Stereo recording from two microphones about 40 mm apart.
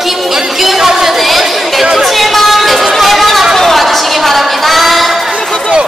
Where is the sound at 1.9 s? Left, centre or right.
Centre.